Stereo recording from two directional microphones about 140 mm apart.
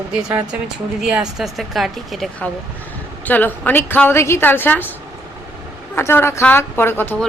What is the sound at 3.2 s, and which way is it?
A woman's voice, 10° left (ahead or behind).